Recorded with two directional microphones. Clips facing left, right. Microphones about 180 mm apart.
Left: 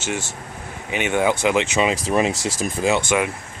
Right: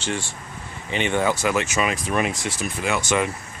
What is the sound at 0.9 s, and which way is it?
Speech, 10° left (ahead or behind).